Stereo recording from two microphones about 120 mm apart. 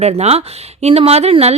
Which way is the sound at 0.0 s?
60° right (ahead or behind).